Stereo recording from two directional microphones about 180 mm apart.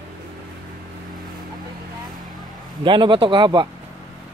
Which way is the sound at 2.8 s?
25° right (ahead or behind).